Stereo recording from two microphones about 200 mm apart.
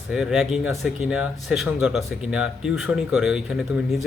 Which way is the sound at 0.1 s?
Centre (ahead or behind).